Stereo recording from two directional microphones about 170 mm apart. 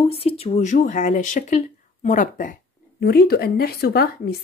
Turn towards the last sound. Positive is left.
turn(degrees=65)  # may be behind; listen again after turning